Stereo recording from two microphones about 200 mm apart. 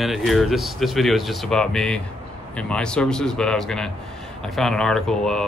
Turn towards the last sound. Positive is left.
turn(degrees=5)  # may be behind; listen again after turning